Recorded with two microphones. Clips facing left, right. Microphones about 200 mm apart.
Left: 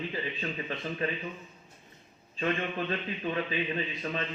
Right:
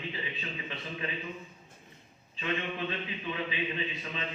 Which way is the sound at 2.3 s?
45° left (ahead or behind).